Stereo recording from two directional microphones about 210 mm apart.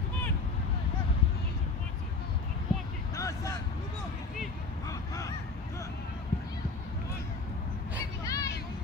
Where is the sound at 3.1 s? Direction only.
15° left (ahead or behind).